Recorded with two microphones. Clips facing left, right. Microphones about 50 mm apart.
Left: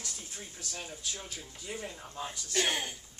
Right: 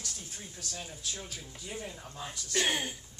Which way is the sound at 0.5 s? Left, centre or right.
Centre.